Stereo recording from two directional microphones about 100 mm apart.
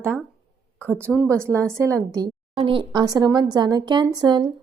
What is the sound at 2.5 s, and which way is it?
Speech, 60° right (ahead or behind).